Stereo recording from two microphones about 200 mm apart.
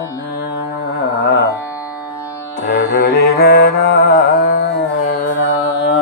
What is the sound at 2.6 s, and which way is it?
Music, 50° left (ahead or behind).